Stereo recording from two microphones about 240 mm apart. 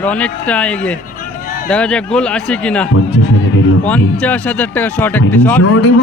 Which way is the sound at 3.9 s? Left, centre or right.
Centre.